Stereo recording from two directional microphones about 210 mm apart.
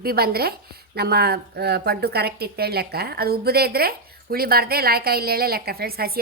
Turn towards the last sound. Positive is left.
turn(degrees=-45)  # may be behind; listen again after turning